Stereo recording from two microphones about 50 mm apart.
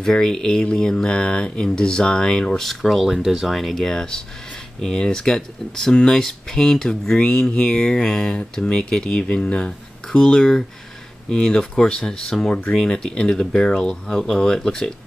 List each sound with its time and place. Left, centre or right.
0.0 s speech: centre